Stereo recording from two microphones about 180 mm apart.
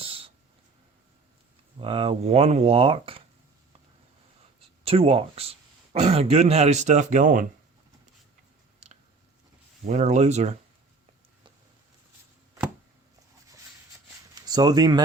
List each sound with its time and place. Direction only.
0.0 s a sound: 30° right (ahead or behind)
1.8 s a man's voice: 30° right (ahead or behind)
4.8 s a man's voice: 35° right (ahead or behind)
9.8 s a man's voice: 40° right (ahead or behind)
14.3 s speech: 20° right (ahead or behind)